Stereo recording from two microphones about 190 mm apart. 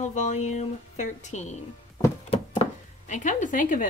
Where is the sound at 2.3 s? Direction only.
35° left (ahead or behind).